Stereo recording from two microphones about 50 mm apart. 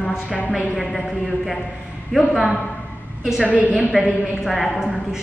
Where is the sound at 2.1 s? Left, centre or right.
Centre.